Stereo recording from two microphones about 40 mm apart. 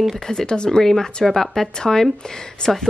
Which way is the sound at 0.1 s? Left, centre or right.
Centre.